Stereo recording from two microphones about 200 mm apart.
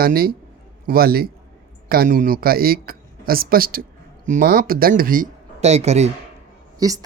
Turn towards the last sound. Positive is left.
turn(degrees=-20)  # may be behind; listen again after turning